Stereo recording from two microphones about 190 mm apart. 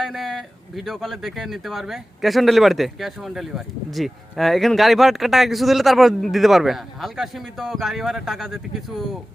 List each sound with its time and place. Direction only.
0.0 s speech: centre (ahead or behind)